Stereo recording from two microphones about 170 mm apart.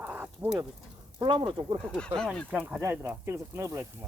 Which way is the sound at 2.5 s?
10° right (ahead or behind).